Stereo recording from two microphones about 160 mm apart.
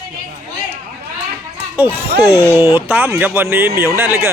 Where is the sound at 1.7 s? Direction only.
10° right (ahead or behind).